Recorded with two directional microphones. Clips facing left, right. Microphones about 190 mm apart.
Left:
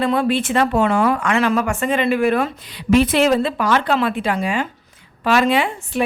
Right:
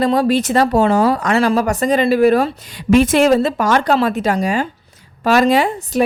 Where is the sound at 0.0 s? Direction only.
40° right (ahead or behind).